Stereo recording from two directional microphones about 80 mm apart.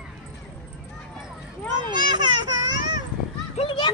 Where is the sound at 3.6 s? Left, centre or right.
Left.